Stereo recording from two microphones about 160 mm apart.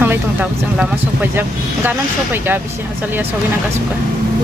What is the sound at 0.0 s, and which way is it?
Speech, 10° right (ahead or behind).